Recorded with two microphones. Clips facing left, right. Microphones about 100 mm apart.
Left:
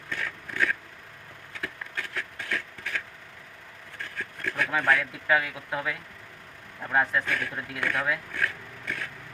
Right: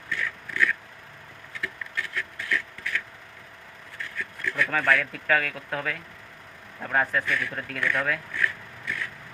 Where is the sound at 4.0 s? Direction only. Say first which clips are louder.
Right 1 dB; 50° left (ahead or behind).